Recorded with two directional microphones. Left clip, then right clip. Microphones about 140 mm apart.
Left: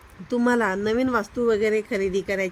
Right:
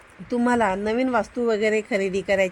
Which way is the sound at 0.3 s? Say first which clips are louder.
Right 1 dB; 5° right (ahead or behind).